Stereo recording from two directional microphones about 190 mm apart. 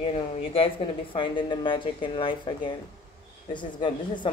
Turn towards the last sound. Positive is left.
turn(degrees=25)  # may be behind; listen again after turning